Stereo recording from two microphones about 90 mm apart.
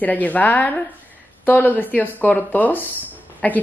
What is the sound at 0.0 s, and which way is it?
Speech, 15° left (ahead or behind).